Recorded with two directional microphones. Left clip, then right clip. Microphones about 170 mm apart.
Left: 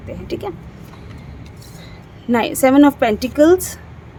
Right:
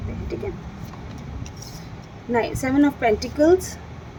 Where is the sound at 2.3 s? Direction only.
70° left (ahead or behind).